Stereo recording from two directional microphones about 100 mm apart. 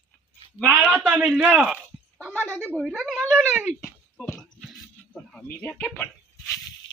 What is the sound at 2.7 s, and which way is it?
Speech, centre (ahead or behind).